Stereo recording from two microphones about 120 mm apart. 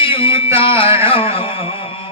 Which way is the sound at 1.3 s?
50° left (ahead or behind).